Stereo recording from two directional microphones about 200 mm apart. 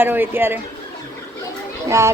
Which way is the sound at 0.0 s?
10° right (ahead or behind).